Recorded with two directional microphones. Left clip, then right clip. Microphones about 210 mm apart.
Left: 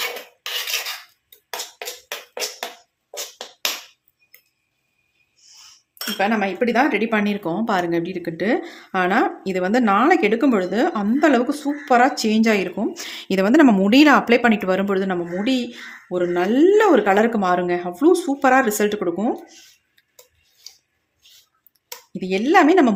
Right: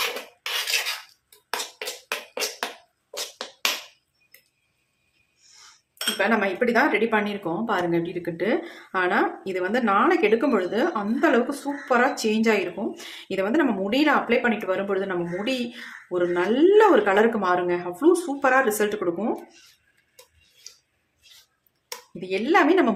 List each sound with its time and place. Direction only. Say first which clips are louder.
6.1 s speech: left 2 dB; 30° left (ahead or behind)
22.2 s speech: left 5 dB; 35° left (ahead or behind)